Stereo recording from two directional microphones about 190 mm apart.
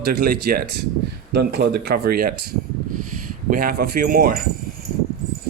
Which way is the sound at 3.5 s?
50° right (ahead or behind).